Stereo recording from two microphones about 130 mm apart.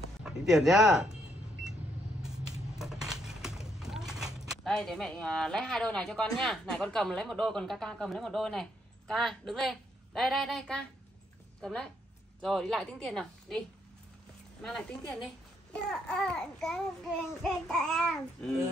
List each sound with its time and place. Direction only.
0.2 s speech: 5° right (ahead or behind)
2.2 s a woman's voice: 5° right (ahead or behind)